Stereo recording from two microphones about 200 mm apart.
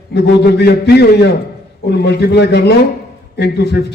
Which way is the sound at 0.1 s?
55° left (ahead or behind).